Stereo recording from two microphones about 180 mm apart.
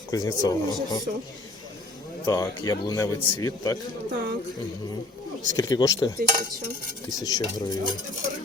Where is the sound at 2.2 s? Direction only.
20° left (ahead or behind).